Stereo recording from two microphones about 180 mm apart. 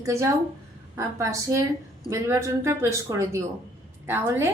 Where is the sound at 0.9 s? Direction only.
15° right (ahead or behind).